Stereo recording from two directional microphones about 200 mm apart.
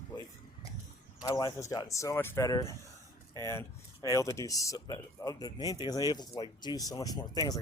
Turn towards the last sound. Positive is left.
turn(degrees=20)  # may be behind; listen again after turning